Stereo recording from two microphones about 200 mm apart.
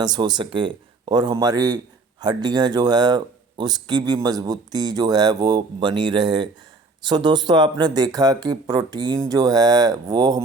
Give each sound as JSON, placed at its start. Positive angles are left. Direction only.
{"t": 0.0, "sound": "speech", "side_deg": -20}